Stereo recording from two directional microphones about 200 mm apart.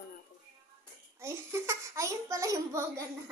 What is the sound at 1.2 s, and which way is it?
A child's voice, 15° right (ahead or behind).